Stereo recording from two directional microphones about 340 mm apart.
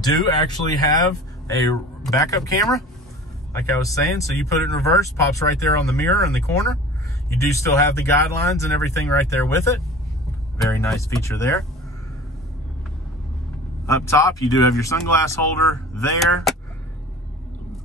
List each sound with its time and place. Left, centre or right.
0.0 s speech: centre
13.8 s speech: centre